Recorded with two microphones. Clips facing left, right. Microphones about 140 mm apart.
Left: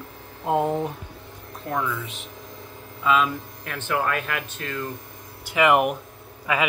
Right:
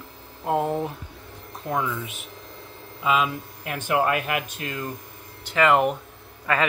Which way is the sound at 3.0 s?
10° right (ahead or behind).